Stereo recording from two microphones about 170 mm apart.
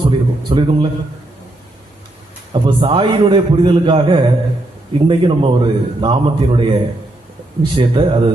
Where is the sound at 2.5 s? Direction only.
30° right (ahead or behind).